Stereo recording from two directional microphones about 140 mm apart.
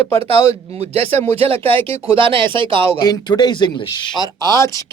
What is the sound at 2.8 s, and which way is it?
Speech, 15° left (ahead or behind).